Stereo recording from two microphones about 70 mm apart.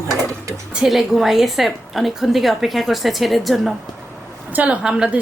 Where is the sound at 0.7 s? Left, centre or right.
Centre.